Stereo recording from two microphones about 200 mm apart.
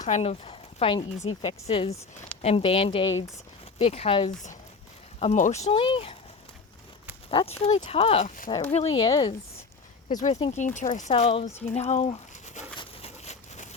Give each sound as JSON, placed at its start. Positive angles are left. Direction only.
{"t": 0.0, "sound": "speech", "side_deg": 35}
{"t": 7.3, "sound": "speech", "side_deg": 30}
{"t": 10.1, "sound": "speech", "side_deg": 35}
{"t": 11.1, "sound": "a sound", "side_deg": 30}